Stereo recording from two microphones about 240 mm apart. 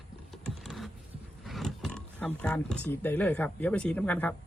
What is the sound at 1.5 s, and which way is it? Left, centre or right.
Speech, centre.